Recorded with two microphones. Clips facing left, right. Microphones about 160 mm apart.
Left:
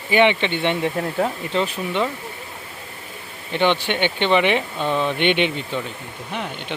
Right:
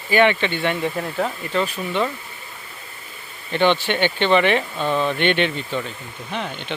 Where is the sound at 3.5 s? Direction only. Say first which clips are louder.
Right 1 dB; 15° left (ahead or behind).